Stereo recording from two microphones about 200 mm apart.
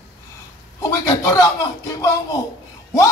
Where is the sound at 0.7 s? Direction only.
15° left (ahead or behind).